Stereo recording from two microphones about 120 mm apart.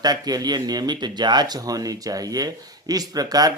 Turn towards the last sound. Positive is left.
turn(degrees=-35)  # may be behind; listen again after turning